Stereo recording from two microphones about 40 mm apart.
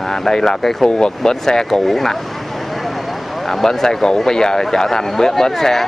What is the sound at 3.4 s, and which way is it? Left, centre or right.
A man's voice, centre.